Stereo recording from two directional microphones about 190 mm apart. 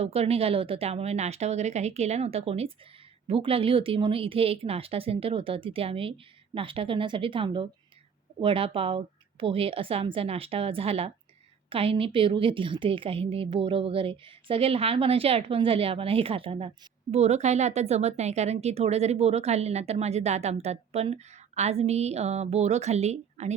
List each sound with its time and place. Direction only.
0.0 s a woman's voice: 30° right (ahead or behind)